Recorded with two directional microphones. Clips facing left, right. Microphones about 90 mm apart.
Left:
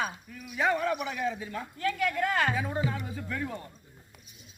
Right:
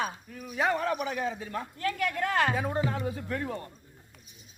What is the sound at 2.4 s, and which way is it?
Speech, 50° right (ahead or behind).